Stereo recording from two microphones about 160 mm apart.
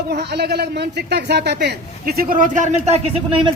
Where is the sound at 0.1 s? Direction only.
90° right.